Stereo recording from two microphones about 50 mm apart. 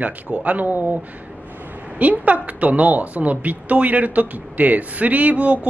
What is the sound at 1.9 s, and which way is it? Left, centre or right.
A woman's voice, right.